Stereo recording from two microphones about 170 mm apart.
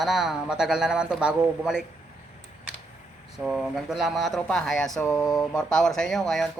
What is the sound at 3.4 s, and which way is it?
Speech, centre (ahead or behind).